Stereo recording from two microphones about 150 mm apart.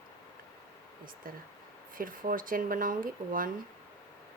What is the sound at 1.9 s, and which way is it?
Speech, 70° right (ahead or behind).